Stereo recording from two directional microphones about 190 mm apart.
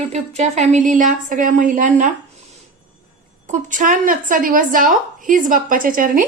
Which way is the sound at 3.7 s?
45° right (ahead or behind).